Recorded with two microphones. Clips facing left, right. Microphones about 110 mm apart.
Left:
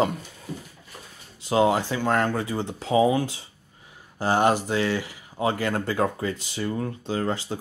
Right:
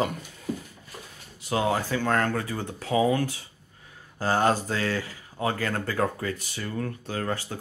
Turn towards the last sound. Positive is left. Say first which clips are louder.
# left 4 dB
turn(degrees=20)  # may be behind; listen again after turning